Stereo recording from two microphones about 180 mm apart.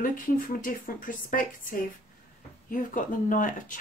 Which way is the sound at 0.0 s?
50° left (ahead or behind).